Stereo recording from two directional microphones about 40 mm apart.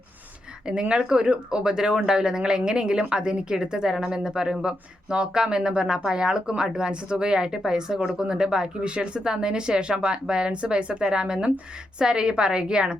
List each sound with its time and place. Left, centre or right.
0.7 s a woman's voice: right